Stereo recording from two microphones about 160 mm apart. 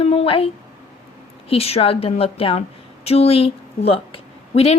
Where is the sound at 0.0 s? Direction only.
40° left (ahead or behind).